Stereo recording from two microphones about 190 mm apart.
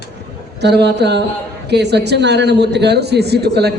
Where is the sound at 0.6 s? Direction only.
60° right (ahead or behind).